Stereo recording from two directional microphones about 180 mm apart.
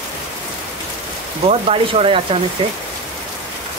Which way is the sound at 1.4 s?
30° right (ahead or behind).